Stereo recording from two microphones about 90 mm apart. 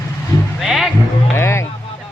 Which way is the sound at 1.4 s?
30° left (ahead or behind).